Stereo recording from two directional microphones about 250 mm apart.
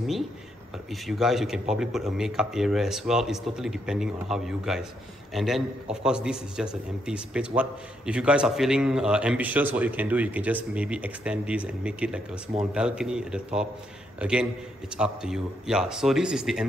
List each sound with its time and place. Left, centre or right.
1.0 s a man's voice: centre